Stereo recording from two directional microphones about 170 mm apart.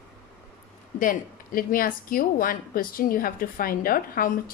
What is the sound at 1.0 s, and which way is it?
A woman's voice, 55° left (ahead or behind).